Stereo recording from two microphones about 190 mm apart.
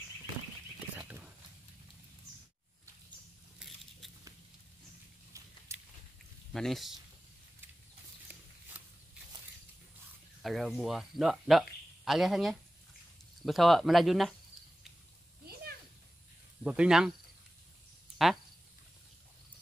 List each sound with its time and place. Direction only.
0.9 s whispering: 10° right (ahead or behind)
3.5 s biting: centre (ahead or behind)
5.3 s a sound: 15° right (ahead or behind)
5.7 s biting: 15° right (ahead or behind)
6.5 s speech: centre (ahead or behind)
10.4 s speech: centre (ahead or behind)
16.6 s speech: 5° right (ahead or behind)
18.1 s a sound: centre (ahead or behind)